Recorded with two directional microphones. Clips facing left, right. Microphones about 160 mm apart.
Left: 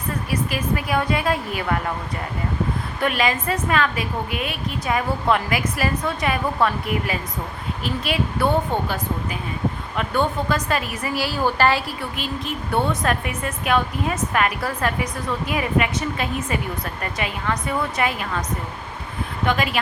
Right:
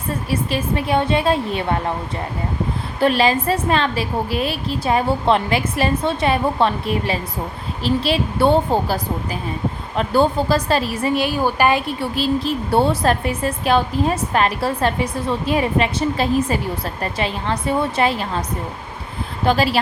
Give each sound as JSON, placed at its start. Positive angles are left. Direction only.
{"t": 0.3, "sound": "a woman's voice", "side_deg": -30}
{"t": 3.0, "sound": "a woman's voice", "side_deg": -30}
{"t": 11.9, "sound": "a woman's voice", "side_deg": -35}
{"t": 19.5, "sound": "a woman's voice", "side_deg": -30}